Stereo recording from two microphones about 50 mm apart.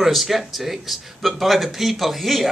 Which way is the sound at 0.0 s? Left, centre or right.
Centre.